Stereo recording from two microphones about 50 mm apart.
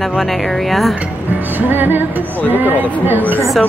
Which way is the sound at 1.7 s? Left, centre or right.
Right.